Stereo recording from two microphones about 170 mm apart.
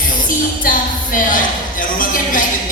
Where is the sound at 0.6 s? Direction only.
50° left (ahead or behind).